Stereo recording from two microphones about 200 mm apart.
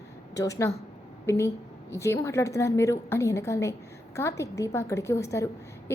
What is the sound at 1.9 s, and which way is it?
A woman's voice, 15° left (ahead or behind).